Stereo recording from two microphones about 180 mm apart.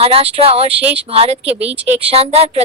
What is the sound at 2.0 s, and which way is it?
Speech, 35° right (ahead or behind).